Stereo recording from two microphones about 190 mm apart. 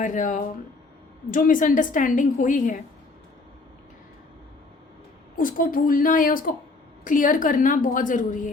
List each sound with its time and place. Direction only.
0.0 s a woman's voice: 40° left (ahead or behind)
5.4 s a woman's voice: 45° left (ahead or behind)